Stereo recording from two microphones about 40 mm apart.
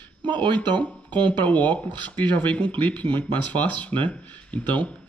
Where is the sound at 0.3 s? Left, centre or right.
Left.